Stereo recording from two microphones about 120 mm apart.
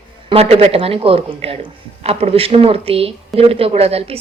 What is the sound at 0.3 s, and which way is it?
A woman's voice, 55° right (ahead or behind).